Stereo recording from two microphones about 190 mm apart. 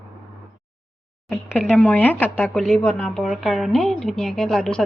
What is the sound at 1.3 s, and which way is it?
A woman's voice, 5° left (ahead or behind).